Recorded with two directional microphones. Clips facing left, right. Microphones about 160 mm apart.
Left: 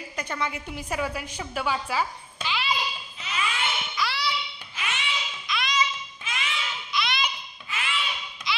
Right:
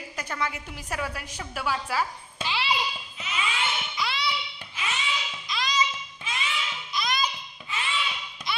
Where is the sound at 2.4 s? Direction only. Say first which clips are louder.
Even; 30° right (ahead or behind).